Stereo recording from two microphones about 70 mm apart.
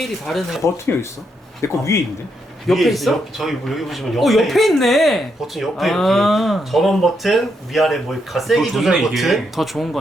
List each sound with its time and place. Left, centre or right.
0.0 s speech: centre
0.9 s speech: left
1.6 s a man's voice: left
2.6 s speech: centre